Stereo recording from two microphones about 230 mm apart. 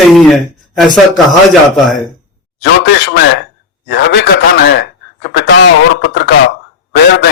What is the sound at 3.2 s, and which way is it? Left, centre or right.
A man's voice, left.